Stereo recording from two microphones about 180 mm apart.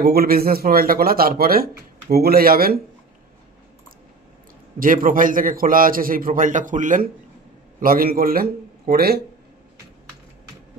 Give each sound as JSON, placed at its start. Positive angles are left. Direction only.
{"t": 0.0, "sound": "speech", "side_deg": -60}
{"t": 4.7, "sound": "a man's voice", "side_deg": -50}